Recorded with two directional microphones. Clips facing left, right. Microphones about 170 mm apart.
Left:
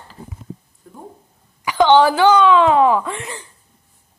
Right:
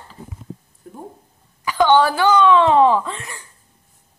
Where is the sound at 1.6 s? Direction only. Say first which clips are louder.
Left 2 dB; 15° left (ahead or behind).